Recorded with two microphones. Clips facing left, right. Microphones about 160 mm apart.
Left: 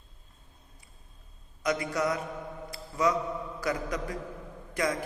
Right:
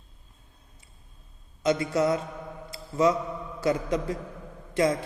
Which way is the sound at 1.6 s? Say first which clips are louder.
Right 5 dB; 25° right (ahead or behind).